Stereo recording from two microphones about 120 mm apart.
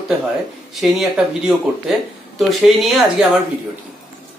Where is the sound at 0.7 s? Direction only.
5° right (ahead or behind).